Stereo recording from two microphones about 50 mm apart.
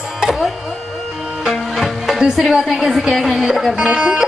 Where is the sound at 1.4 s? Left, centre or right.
Centre.